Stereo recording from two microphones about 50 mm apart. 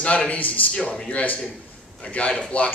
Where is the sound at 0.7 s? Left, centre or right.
Centre.